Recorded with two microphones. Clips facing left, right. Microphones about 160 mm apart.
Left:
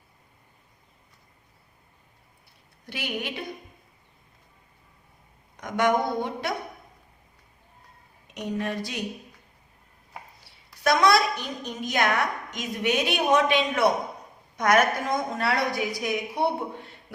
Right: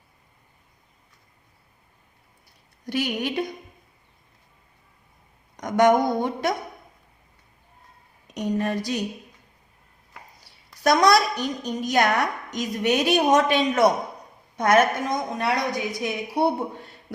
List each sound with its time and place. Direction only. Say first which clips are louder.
2.8 s a woman's voice: right 7 dB; 40° right (ahead or behind)
5.5 s speech: right 5 dB; 40° right (ahead or behind)
8.3 s a woman's voice: right 5 dB; 40° right (ahead or behind)
10.8 s a woman's voice: right 2 dB; 40° right (ahead or behind)
14.5 s a woman's voice: right 2 dB; 30° right (ahead or behind)